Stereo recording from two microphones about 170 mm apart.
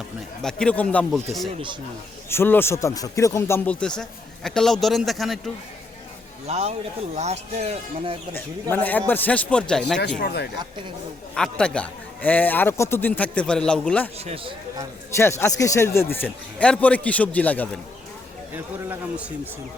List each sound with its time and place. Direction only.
0.4 s speech: 5° left (ahead or behind)
2.3 s a man's voice: 15° left (ahead or behind)
6.5 s speech: 40° right (ahead or behind)
8.7 s a man's voice: 10° left (ahead or behind)
10.2 s speech: 70° left (ahead or behind)
11.3 s a man's voice: 5° left (ahead or behind)
14.3 s speech: 30° right (ahead or behind)
15.1 s a man's voice: 15° left (ahead or behind)
18.5 s a man's voice: 10° right (ahead or behind)